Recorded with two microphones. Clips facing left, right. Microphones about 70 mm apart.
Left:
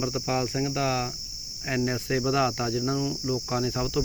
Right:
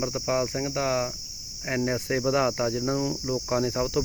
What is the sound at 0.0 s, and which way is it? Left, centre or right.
Cricket, right.